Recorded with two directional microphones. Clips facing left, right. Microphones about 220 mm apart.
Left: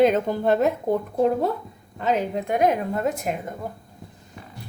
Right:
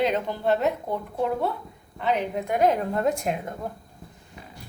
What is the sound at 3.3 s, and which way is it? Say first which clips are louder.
Speech: even; 5° left (ahead or behind).